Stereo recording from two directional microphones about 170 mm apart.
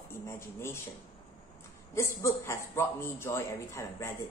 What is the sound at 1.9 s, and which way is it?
A woman's voice, 15° left (ahead or behind).